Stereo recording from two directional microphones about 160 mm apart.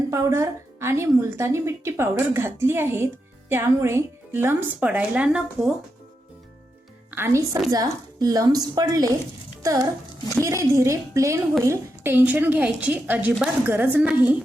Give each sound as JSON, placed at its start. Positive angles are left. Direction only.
{"t": 0.1, "sound": "a woman's voice", "side_deg": -20}
{"t": 7.1, "sound": "a woman's voice", "side_deg": -15}
{"t": 10.3, "sound": "a woman's voice", "side_deg": -20}